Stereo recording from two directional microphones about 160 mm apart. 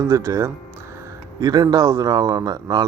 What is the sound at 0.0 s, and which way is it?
Speech, 20° right (ahead or behind).